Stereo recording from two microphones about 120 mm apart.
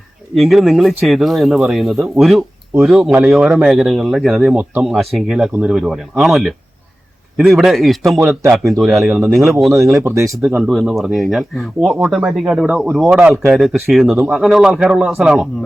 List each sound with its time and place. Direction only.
0.3 s speech: centre (ahead or behind)
9.7 s speech: 25° right (ahead or behind)
10.6 s speech: centre (ahead or behind)